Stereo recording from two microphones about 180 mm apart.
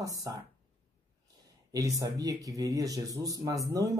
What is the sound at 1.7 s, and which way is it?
Speech, 20° right (ahead or behind).